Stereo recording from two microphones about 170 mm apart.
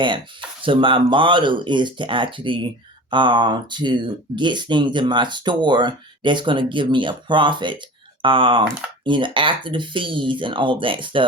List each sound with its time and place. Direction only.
0.6 s speech: 30° right (ahead or behind)